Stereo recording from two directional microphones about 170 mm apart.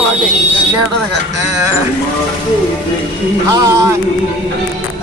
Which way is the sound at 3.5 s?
20° right (ahead or behind).